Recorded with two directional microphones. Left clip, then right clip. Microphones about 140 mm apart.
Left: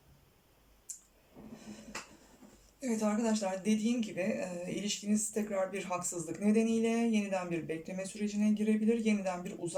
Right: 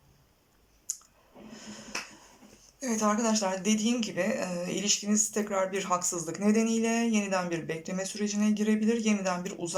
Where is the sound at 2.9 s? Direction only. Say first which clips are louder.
Right 6 dB; 30° left (ahead or behind).